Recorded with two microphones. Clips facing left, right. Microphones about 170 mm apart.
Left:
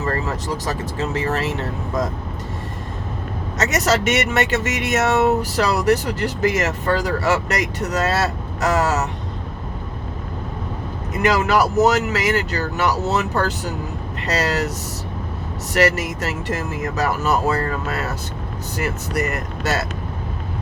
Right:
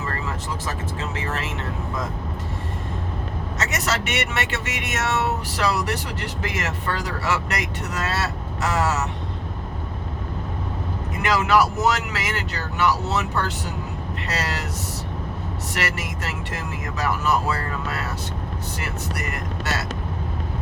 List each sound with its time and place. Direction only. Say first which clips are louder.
0.0 s speech: left 6 dB; 40° left (ahead or behind)
3.6 s speech: left 8 dB; 40° left (ahead or behind)
11.2 s speech: left 2 dB; 40° left (ahead or behind)
15.7 s speech: left 11 dB; 40° left (ahead or behind)